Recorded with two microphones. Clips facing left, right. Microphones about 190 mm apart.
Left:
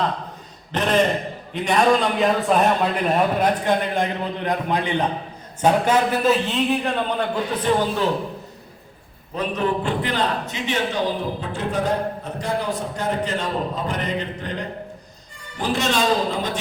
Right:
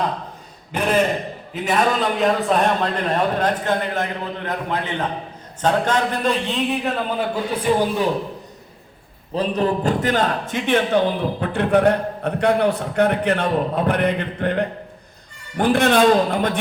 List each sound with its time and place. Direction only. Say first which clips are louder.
0.7 s a man's voice: even; 10° right (ahead or behind)
9.3 s a man's voice: right 3 dB; 35° right (ahead or behind); by 16.6 s 55° right (ahead or behind)